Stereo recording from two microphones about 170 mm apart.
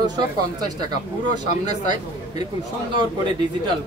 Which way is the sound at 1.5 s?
45° left (ahead or behind).